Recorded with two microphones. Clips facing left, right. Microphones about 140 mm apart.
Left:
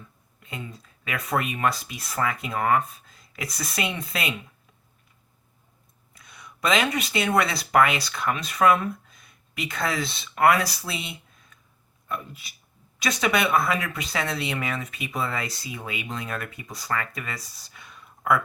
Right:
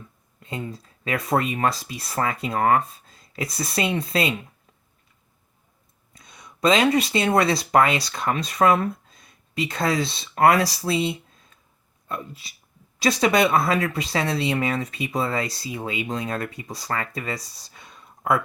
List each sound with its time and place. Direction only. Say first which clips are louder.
0.7 s speech: right 6 dB; 30° right (ahead or behind)
6.1 s speech: right 3 dB; 25° right (ahead or behind)